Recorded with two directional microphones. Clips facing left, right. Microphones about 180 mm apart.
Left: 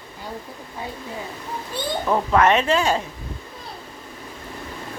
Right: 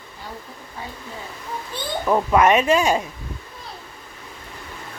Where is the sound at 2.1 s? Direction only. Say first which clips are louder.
Right 2 dB; 10° right (ahead or behind).